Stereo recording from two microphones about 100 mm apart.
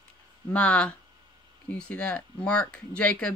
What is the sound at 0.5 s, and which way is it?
Speech, 15° left (ahead or behind).